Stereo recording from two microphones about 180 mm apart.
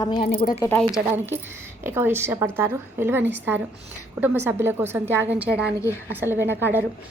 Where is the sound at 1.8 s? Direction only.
10° right (ahead or behind).